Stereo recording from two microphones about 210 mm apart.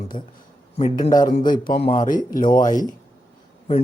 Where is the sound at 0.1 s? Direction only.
40° left (ahead or behind).